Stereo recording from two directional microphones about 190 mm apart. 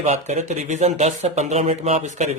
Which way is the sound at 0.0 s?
35° right (ahead or behind).